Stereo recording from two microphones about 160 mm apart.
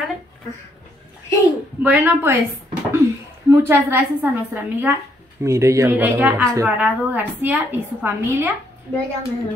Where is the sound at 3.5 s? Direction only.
15° right (ahead or behind).